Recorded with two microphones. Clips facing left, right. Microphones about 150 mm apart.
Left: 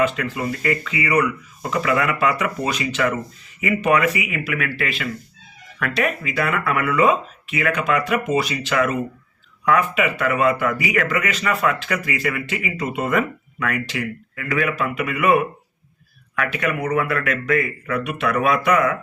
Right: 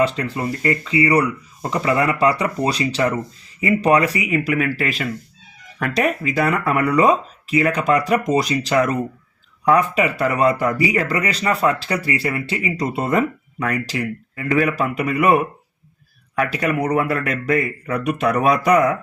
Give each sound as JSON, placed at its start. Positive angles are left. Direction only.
{"t": 0.0, "sound": "speech", "side_deg": -35}